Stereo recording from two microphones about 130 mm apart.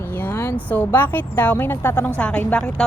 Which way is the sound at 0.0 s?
15° left (ahead or behind).